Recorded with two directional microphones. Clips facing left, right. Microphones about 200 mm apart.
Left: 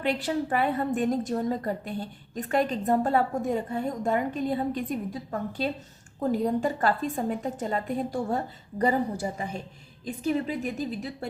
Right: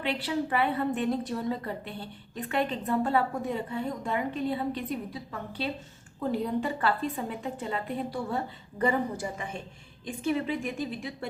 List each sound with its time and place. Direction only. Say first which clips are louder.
0.0 s a woman's voice: left 3 dB; 45° left (ahead or behind)